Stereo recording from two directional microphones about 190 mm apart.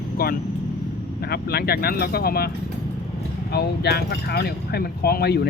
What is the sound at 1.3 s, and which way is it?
Speech, 55° left (ahead or behind).